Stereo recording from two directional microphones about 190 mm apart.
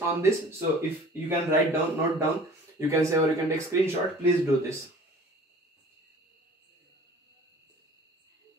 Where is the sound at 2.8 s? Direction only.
15° right (ahead or behind).